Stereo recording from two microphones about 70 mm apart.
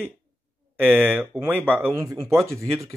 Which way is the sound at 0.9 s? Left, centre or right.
Right.